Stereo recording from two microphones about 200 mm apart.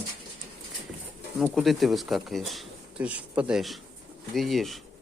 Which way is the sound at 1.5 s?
Centre (ahead or behind).